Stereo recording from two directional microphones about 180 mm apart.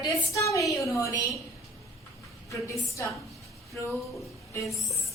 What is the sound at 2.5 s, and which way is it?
Speech, 15° left (ahead or behind).